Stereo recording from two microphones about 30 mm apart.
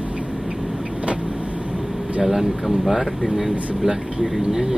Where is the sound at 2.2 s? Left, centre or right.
Centre.